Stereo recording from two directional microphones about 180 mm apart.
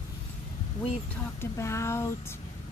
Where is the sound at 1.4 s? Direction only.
15° left (ahead or behind).